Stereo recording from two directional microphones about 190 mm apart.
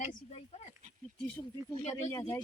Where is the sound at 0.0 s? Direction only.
35° left (ahead or behind).